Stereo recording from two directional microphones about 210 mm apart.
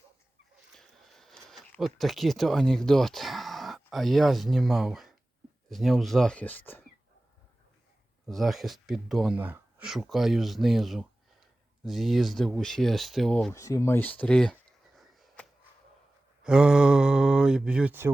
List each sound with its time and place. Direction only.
0.7 s a sound: centre (ahead or behind)
5.6 s speech: centre (ahead or behind)
8.3 s speech: centre (ahead or behind)
13.5 s speech: 15° left (ahead or behind)
14.9 s a sound: centre (ahead or behind)
16.4 s speech: 5° right (ahead or behind)